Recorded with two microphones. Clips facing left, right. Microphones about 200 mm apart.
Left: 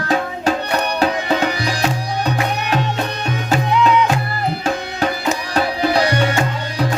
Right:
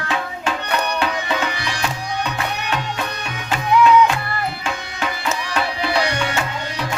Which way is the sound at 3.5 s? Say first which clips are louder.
Right 2 dB; 40° left (ahead or behind).